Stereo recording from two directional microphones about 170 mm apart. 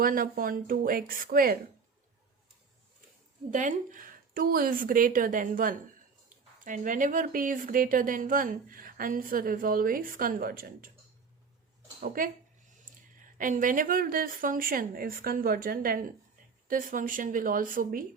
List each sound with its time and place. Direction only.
0.0 s speech: 55° right (ahead or behind)
3.5 s a woman's voice: 50° right (ahead or behind)
11.9 s speech: 55° right (ahead or behind)
13.4 s a woman's voice: 50° right (ahead or behind)